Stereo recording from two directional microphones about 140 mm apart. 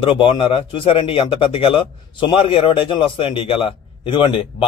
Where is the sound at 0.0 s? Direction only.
40° left (ahead or behind).